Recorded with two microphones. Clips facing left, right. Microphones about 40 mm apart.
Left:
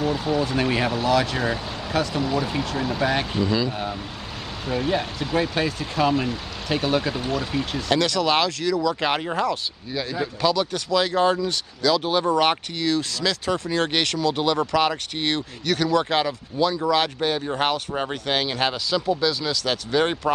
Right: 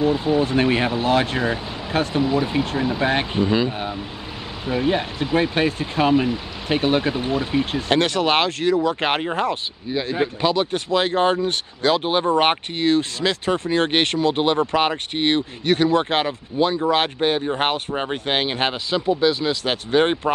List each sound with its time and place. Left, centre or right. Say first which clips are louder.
0.0 s speech: right 4 dB; right
8.0 s speech: right 2 dB; right
17.4 s speech: right 2 dB; right
18.1 s speech: right 3 dB; right